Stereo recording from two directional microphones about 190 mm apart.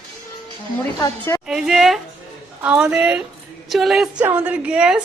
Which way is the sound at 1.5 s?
5° right (ahead or behind).